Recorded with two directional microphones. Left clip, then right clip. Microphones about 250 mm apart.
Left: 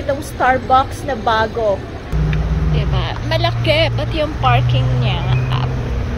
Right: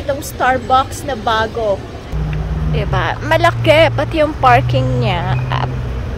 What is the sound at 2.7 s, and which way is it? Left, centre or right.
Speech, centre.